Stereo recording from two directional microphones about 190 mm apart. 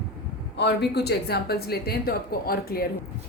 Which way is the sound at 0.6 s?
60° left (ahead or behind).